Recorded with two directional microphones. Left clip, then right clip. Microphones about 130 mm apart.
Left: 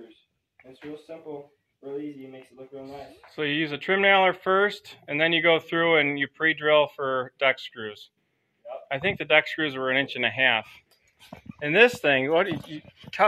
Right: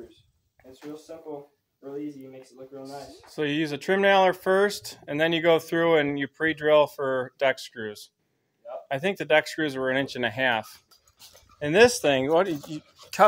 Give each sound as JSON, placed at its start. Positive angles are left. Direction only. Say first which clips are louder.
{"t": 2.8, "sound": "speech", "louder": "right 1 dB", "side_deg": -5}
{"t": 3.3, "sound": "speech", "louder": "even", "side_deg": -40}